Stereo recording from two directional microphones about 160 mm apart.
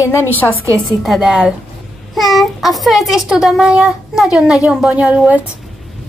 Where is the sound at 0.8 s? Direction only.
Centre (ahead or behind).